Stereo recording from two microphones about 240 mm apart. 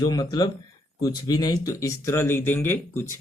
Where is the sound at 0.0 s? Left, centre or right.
Centre.